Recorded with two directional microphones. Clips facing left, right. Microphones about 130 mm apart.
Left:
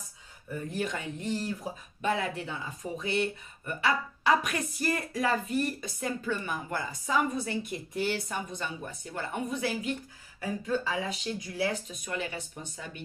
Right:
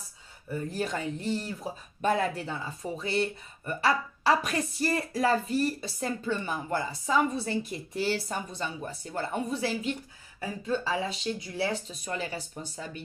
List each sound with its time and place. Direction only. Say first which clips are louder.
0.7 s speech: right 1 dB; 35° right (ahead or behind)